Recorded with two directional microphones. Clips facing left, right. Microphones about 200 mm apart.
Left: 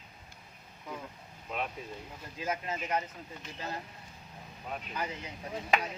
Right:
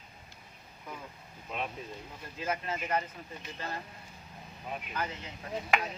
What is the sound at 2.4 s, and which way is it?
Speech, 10° left (ahead or behind).